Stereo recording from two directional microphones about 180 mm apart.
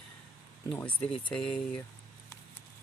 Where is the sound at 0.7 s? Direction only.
10° left (ahead or behind).